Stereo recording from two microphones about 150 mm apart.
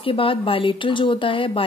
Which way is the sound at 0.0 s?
35° left (ahead or behind).